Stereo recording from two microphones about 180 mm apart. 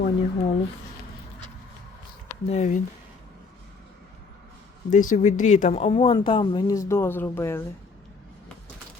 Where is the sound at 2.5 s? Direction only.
40° left (ahead or behind).